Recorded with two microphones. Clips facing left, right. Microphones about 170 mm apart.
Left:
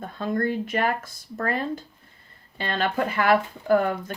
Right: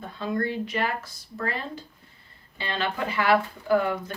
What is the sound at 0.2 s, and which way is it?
Speech, 50° left (ahead or behind).